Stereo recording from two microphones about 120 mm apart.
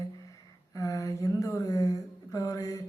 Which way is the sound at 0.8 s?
25° left (ahead or behind).